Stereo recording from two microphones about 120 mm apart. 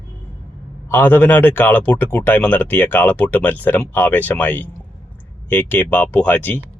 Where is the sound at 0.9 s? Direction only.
15° left (ahead or behind).